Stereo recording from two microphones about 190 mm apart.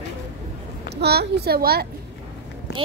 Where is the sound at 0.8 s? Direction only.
60° right (ahead or behind).